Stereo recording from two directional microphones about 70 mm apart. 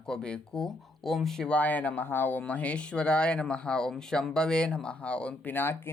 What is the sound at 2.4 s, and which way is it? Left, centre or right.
Speech, centre.